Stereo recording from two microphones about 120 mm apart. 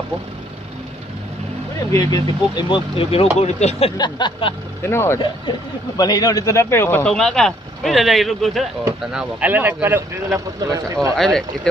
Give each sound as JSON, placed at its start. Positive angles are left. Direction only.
{"t": 1.9, "sound": "speech", "side_deg": 30}
{"t": 3.3, "sound": "speech", "side_deg": 65}
{"t": 4.0, "sound": "a sound", "side_deg": 45}
{"t": 4.8, "sound": "speech", "side_deg": 20}
{"t": 5.9, "sound": "speech", "side_deg": 35}
{"t": 7.2, "sound": "speech", "side_deg": 5}
{"t": 11.1, "sound": "speech", "side_deg": 5}